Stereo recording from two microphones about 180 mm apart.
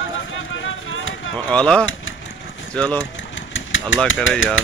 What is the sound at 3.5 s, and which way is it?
Engine, 90° left.